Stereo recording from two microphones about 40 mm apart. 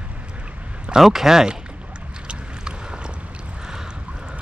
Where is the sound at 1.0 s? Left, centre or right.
Centre.